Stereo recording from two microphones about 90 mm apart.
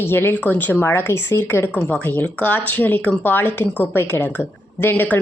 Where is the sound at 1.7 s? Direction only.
15° left (ahead or behind).